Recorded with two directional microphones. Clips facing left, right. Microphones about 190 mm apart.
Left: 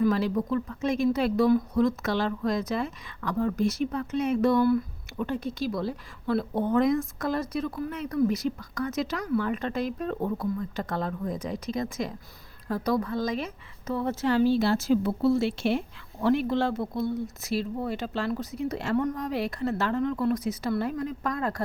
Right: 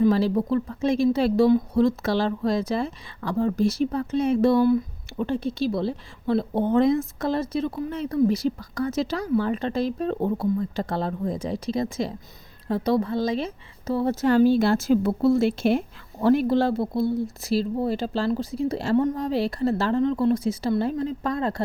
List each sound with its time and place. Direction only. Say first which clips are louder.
0.0 s speech: right 4 dB; 30° right (ahead or behind)